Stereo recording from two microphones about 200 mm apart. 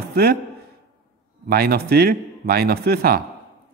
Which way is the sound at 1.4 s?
50° right (ahead or behind).